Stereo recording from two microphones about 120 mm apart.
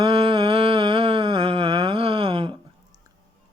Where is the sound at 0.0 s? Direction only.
40° right (ahead or behind).